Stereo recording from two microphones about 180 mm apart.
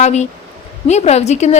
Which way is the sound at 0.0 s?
40° left (ahead or behind).